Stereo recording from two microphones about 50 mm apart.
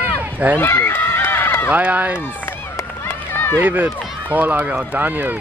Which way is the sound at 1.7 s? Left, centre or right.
Right.